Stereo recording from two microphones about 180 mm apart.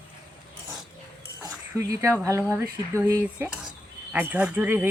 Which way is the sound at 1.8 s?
15° right (ahead or behind).